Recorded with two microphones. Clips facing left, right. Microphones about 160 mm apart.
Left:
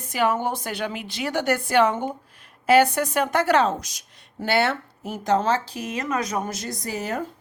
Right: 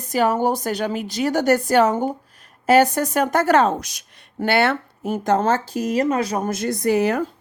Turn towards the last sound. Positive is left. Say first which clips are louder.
# right 10 dB
turn(degrees=-70)  # may be behind; listen again after turning